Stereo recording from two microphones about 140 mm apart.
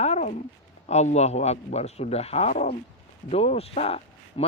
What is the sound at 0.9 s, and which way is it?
Speech, 55° left (ahead or behind).